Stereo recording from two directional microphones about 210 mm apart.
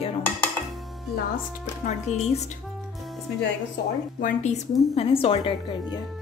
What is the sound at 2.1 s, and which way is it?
Speech, 30° left (ahead or behind).